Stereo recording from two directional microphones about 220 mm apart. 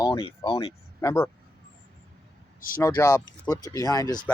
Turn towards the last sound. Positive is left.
turn(degrees=15)  # may be behind; listen again after turning